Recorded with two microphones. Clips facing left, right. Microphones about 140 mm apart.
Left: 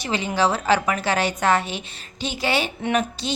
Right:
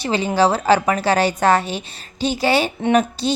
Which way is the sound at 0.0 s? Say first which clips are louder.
Right 5 dB; 30° right (ahead or behind).